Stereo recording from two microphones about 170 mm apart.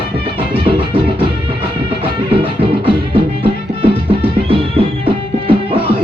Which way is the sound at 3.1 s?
35° right (ahead or behind).